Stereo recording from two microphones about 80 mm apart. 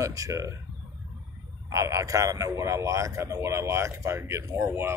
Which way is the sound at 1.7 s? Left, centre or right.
Right.